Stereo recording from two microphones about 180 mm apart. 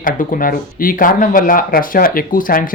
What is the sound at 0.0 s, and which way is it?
Speech, 50° left (ahead or behind).